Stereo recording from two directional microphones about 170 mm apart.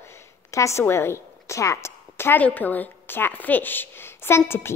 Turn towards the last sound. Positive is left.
turn(degrees=15)  # may be behind; listen again after turning